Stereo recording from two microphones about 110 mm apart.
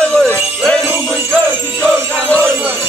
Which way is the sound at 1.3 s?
10° left (ahead or behind).